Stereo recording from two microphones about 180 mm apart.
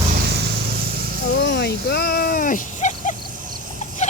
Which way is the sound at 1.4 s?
70° left (ahead or behind).